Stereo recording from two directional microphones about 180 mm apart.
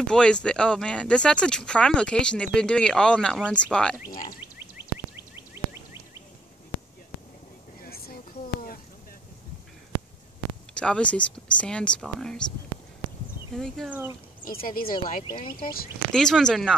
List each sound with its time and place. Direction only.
0.0 s speech: 5° left (ahead or behind)
4.4 s a sound: 10° right (ahead or behind)
7.8 s vehicle: 55° left (ahead or behind)
10.7 s speech: 5° left (ahead or behind)
13.6 s speech: 5° left (ahead or behind)
13.8 s speech: 10° right (ahead or behind)
14.4 s speech: 55° left (ahead or behind)
15.2 s speech: 25° left (ahead or behind)
16.1 s speech: 5° left (ahead or behind)